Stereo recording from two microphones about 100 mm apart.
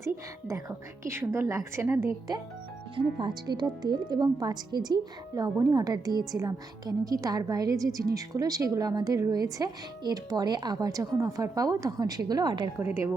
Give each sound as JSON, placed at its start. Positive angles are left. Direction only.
{"t": 0.0, "sound": "a woman's voice", "side_deg": -30}
{"t": 2.9, "sound": "a woman's voice", "side_deg": -55}
{"t": 12.7, "sound": "a woman's voice", "side_deg": -25}